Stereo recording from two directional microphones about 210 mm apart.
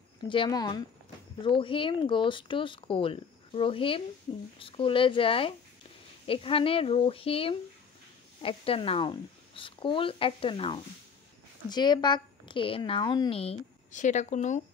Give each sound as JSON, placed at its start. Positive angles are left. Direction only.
{"t": 0.3, "sound": "speech", "side_deg": 20}